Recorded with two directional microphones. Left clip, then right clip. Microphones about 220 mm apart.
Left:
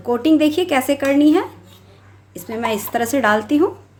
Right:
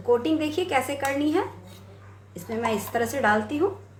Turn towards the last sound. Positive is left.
turn(degrees=50)  # may be behind; listen again after turning